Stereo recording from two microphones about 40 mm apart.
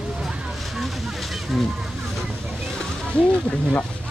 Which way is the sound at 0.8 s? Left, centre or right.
Centre.